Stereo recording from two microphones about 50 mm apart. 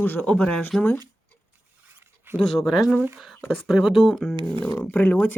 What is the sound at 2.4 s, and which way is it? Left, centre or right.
Speech, centre.